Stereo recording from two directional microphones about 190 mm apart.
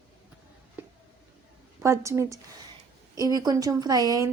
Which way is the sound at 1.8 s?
15° right (ahead or behind).